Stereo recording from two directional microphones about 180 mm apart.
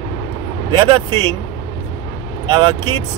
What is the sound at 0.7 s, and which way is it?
Speech, 25° right (ahead or behind).